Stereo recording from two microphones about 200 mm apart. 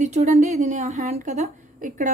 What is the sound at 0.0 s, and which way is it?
A woman's voice, 35° right (ahead or behind).